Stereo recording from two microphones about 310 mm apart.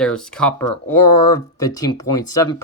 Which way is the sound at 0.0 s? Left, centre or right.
Centre.